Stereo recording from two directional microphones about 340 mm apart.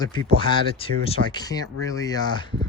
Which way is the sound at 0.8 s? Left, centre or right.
Centre.